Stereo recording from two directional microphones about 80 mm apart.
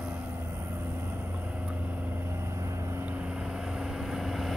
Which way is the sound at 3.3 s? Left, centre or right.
Centre.